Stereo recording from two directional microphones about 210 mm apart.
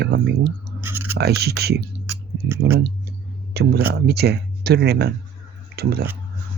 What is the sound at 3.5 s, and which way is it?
Speech, 50° right (ahead or behind).